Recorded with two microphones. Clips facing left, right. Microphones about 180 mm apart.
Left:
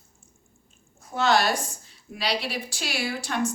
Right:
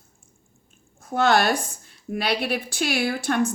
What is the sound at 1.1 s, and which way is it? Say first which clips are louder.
A woman's voice: right 3 dB; 55° right (ahead or behind).